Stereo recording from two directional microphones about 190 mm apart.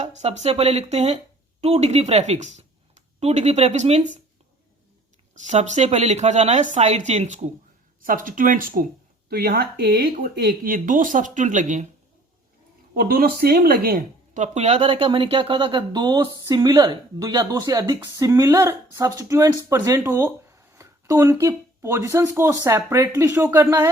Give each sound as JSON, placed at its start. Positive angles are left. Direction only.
{"t": 0.0, "sound": "speech", "side_deg": -35}
{"t": 5.3, "sound": "speech", "side_deg": -40}
{"t": 12.9, "sound": "speech", "side_deg": -50}